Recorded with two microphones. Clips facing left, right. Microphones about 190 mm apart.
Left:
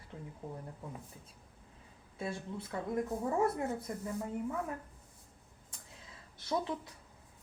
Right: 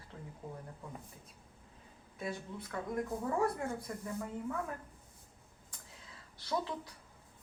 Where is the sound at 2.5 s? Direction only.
25° left (ahead or behind).